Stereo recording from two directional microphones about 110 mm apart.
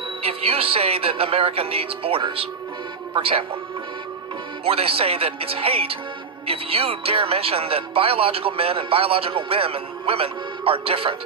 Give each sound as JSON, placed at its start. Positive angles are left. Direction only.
{"t": 0.2, "sound": "speech", "side_deg": -60}
{"t": 4.6, "sound": "speech", "side_deg": -60}